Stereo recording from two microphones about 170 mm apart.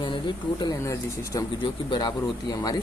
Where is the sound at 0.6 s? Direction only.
20° left (ahead or behind).